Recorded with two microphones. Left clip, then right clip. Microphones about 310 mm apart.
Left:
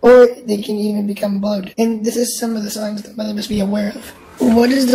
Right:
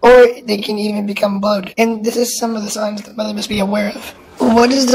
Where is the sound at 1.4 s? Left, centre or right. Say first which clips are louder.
Right 4 dB; centre.